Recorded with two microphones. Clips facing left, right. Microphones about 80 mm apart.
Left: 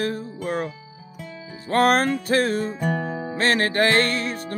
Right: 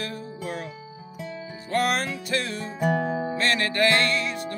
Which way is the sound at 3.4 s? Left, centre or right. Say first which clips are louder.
Left 5 dB; left.